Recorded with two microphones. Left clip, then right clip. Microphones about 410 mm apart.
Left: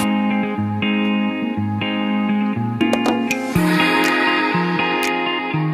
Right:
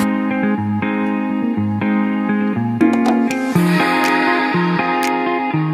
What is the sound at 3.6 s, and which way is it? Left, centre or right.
Music, centre.